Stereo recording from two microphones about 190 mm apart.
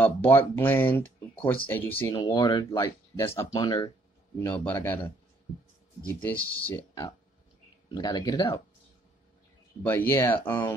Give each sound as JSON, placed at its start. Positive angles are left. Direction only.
{"t": 0.0, "sound": "speech", "side_deg": 10}
{"t": 2.1, "sound": "speech", "side_deg": 20}
{"t": 6.2, "sound": "speech", "side_deg": 10}
{"t": 7.9, "sound": "speech", "side_deg": 20}
{"t": 9.8, "sound": "speech", "side_deg": 10}